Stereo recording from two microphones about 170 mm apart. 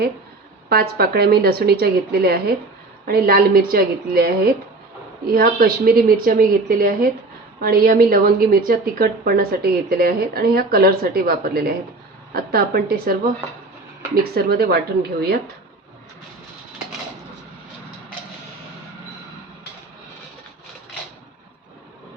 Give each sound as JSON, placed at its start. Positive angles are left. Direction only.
{"t": 0.7, "sound": "a woman's voice", "side_deg": -65}
{"t": 14.3, "sound": "speech", "side_deg": -65}